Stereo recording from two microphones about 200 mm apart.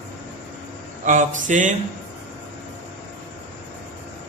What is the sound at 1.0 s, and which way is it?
Speech, 40° right (ahead or behind).